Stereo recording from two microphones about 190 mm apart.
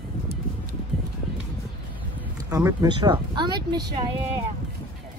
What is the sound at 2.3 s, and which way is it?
Speech, 15° right (ahead or behind).